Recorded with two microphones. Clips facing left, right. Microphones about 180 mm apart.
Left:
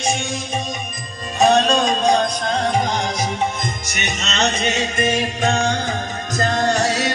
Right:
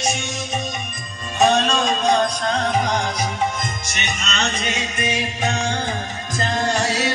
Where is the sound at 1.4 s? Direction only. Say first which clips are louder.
Left 2 dB; 35° left (ahead or behind).